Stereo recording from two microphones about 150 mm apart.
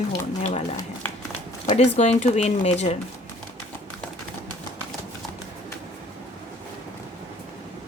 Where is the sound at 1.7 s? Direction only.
45° left (ahead or behind).